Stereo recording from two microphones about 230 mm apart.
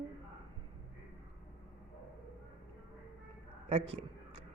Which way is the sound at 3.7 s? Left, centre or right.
Right.